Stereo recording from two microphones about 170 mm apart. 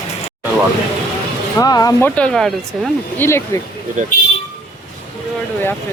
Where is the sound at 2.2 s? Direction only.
5° left (ahead or behind).